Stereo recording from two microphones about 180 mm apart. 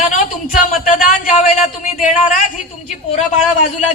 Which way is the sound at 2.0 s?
45° left (ahead or behind).